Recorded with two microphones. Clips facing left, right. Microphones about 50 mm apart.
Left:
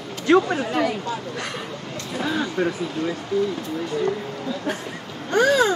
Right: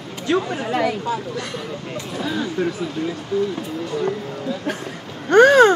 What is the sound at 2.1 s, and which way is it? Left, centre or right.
Speech, centre.